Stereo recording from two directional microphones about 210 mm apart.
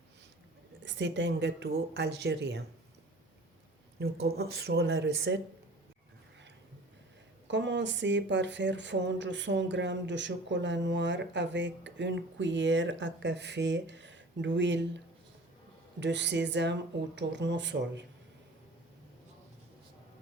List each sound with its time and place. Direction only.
0.9 s speech: 60° right (ahead or behind)
4.0 s speech: 50° right (ahead or behind)
7.4 s speech: 60° right (ahead or behind)